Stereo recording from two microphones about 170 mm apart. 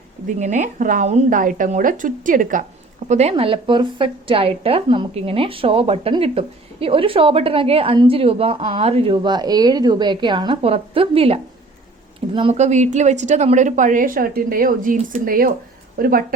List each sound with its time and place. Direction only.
0.3 s speech: 45° right (ahead or behind)
3.1 s a woman's voice: 40° right (ahead or behind); by 16.2 s 60° right (ahead or behind)